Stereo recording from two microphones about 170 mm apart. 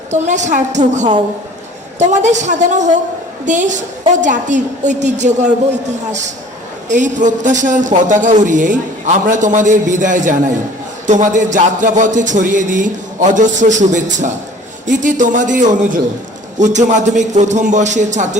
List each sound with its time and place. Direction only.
0.1 s a man's voice: 45° right (ahead or behind)